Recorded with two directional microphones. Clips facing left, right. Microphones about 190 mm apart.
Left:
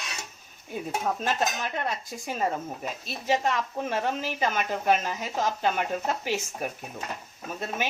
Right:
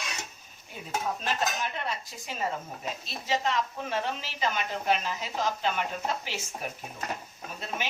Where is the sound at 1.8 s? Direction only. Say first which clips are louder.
Left 4 dB; 50° left (ahead or behind).